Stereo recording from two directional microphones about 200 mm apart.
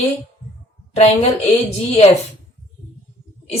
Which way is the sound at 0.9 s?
35° left (ahead or behind).